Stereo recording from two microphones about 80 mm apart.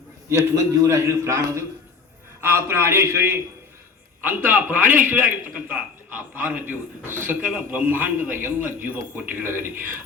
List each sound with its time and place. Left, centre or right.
0.3 s a man's voice: right
4.2 s a man's voice: right